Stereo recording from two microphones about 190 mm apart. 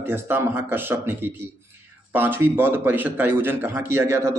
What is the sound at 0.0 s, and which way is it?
A man's voice, 10° right (ahead or behind).